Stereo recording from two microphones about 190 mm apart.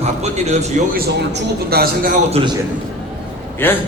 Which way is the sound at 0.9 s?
55° right (ahead or behind).